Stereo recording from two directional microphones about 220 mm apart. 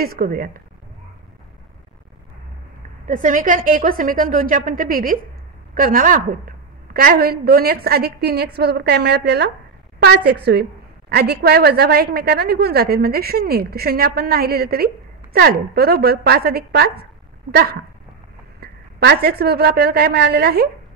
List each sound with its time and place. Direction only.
0.0 s a woman's voice: 45° right (ahead or behind)
3.1 s a woman's voice: 35° right (ahead or behind)